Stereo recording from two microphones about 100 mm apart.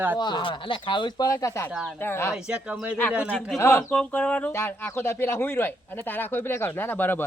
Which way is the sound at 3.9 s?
10° left (ahead or behind).